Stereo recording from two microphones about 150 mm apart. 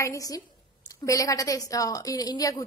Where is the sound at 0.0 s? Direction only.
20° left (ahead or behind).